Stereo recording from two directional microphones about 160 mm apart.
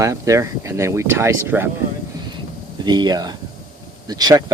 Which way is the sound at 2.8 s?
25° right (ahead or behind).